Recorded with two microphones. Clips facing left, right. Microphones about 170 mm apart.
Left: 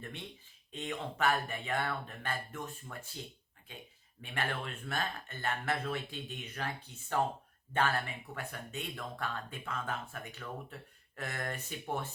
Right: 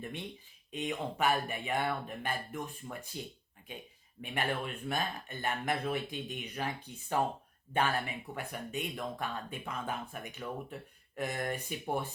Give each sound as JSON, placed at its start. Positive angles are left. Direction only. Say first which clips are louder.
{"t": 0.7, "sound": "speech", "louder": "right 3 dB", "side_deg": -15}
{"t": 4.2, "sound": "speech", "louder": "right 3 dB", "side_deg": -15}